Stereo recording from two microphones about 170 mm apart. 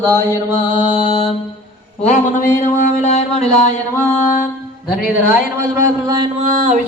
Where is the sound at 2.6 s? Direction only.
45° left (ahead or behind).